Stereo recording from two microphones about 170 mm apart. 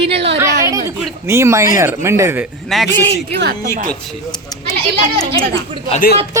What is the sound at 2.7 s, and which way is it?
Speech, centre (ahead or behind).